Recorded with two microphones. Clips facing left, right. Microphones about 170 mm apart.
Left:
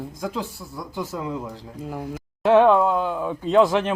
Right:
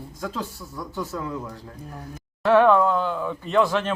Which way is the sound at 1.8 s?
90° left.